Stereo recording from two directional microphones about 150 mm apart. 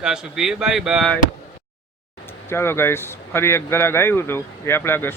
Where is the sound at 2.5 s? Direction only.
15° left (ahead or behind).